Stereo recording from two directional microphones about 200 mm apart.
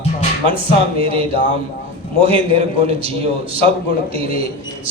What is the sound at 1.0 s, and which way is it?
A man's voice, 30° right (ahead or behind).